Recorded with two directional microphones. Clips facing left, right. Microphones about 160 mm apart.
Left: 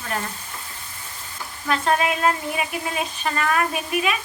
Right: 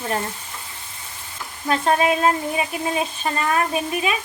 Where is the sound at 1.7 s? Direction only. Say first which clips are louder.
Right 3 dB; 30° right (ahead or behind).